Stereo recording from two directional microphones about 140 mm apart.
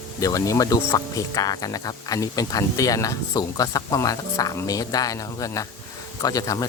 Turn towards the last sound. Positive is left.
turn(degrees=25)  # may be behind; listen again after turning